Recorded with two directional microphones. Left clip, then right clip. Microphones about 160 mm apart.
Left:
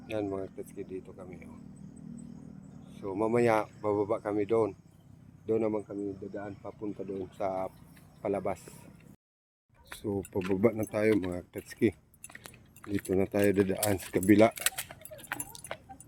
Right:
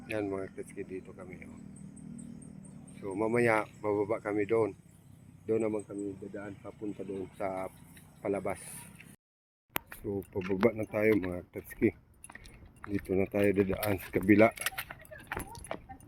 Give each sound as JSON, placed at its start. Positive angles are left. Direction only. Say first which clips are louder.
{"t": 0.1, "sound": "speech", "louder": "left 1 dB", "side_deg": 0}
{"t": 3.0, "sound": "speech", "louder": "left 2 dB", "side_deg": 10}
{"t": 9.9, "sound": "speech", "louder": "left 6 dB", "side_deg": 10}
{"t": 10.3, "sound": "speech", "louder": "left 3 dB", "side_deg": -5}
{"t": 10.6, "sound": "speech", "louder": "even", "side_deg": 10}
{"t": 13.7, "sound": "speech", "louder": "left 2 dB", "side_deg": 30}
{"t": 14.1, "sound": "speech", "louder": "left 1 dB", "side_deg": 20}
{"t": 14.9, "sound": "keys jangling", "louder": "right 2 dB", "side_deg": 25}
{"t": 15.3, "sound": "keys jangling", "louder": "right 1 dB", "side_deg": 0}